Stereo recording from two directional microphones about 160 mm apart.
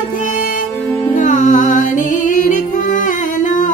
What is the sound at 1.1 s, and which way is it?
Music, 50° left (ahead or behind).